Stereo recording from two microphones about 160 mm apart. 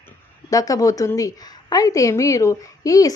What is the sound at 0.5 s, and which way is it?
A woman's voice, 20° left (ahead or behind).